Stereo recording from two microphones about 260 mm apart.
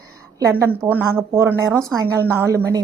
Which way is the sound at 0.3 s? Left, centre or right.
Centre.